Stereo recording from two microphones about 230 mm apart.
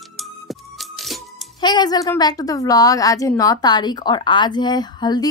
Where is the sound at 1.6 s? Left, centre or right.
Centre.